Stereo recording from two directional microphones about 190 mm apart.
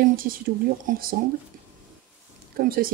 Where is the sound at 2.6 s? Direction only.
50° right (ahead or behind).